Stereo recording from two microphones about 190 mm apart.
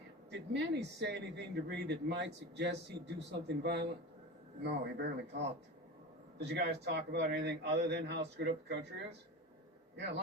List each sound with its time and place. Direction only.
0.3 s a man's voice: 65° right (ahead or behind)